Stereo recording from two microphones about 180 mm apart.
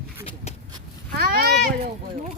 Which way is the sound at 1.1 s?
60° right (ahead or behind).